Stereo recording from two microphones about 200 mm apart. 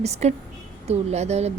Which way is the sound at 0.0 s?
35° right (ahead or behind).